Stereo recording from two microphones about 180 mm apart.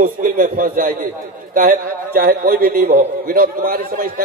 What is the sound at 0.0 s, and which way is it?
A man's voice, 50° right (ahead or behind).